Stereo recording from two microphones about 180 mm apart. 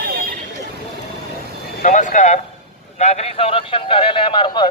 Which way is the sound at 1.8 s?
45° left (ahead or behind).